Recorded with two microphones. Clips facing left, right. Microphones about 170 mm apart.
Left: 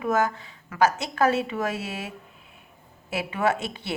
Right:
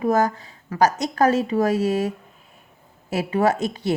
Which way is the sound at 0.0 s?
40° right (ahead or behind).